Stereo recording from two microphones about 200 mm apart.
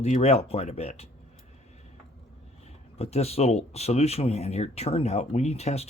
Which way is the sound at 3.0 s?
30° left (ahead or behind).